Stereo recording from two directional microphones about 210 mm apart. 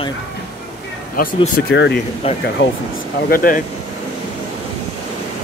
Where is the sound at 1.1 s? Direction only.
45° left (ahead or behind).